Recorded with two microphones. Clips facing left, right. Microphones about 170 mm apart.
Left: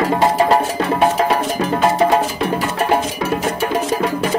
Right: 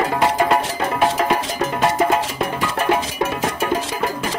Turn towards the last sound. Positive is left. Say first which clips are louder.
# left 3 dB
turn(degrees=40)  # may be behind; listen again after turning